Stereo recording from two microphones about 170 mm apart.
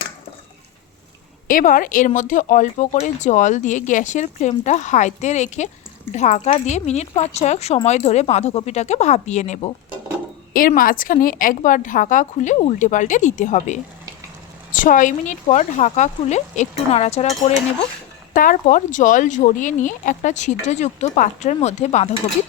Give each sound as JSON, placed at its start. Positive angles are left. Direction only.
{"t": 1.5, "sound": "speech", "side_deg": 55}
{"t": 10.5, "sound": "speech", "side_deg": 55}
{"t": 18.3, "sound": "speech", "side_deg": 50}